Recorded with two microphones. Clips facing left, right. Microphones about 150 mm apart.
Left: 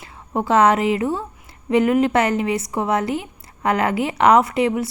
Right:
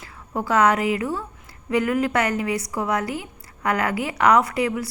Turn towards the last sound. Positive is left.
turn(degrees=25)  # may be behind; listen again after turning